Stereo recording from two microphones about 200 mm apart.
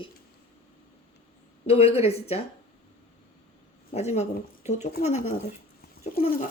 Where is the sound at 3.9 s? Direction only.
35° left (ahead or behind).